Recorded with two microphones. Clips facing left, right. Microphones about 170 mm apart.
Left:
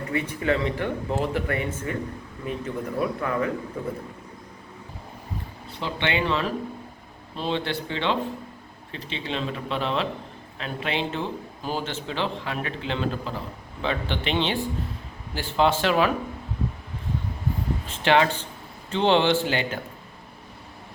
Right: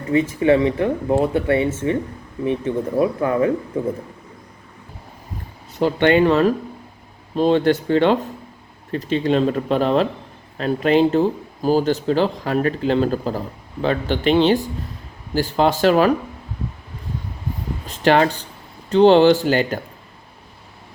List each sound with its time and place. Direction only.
0.3 s speech: 25° right (ahead or behind)
5.7 s a man's voice: 45° right (ahead or behind)
17.8 s a man's voice: 40° right (ahead or behind)